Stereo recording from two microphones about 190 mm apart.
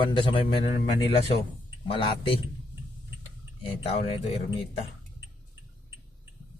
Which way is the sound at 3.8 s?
30° left (ahead or behind).